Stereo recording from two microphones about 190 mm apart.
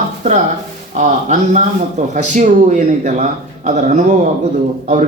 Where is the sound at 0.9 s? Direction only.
40° right (ahead or behind).